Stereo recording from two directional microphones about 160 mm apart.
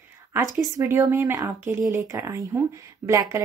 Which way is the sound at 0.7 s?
20° right (ahead or behind).